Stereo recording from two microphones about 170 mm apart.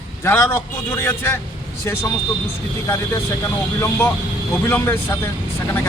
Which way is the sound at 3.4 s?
15° left (ahead or behind).